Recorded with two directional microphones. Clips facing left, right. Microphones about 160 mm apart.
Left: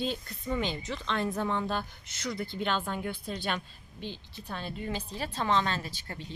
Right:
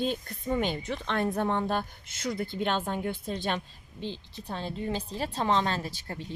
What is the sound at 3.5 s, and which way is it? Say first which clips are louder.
A woman's voice: right 3 dB; 25° right (ahead or behind).